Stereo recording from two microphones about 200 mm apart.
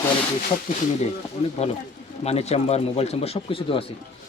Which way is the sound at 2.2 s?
30° left (ahead or behind).